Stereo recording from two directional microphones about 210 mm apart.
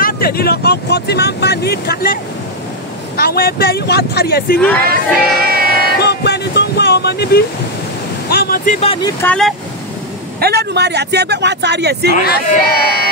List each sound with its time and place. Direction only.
0.0 s speech: 45° left (ahead or behind)
3.2 s speech: 45° left (ahead or behind)
4.6 s speech: 5° left (ahead or behind)
5.5 s music: 45° right (ahead or behind)
5.9 s vehicle: 50° left (ahead or behind)
8.3 s speech: 45° left (ahead or behind); by 9.1 s 25° left (ahead or behind)
9.2 s speech: 5° left (ahead or behind)
10.4 s speech: 50° right (ahead or behind)
12.3 s speech: 45° left (ahead or behind)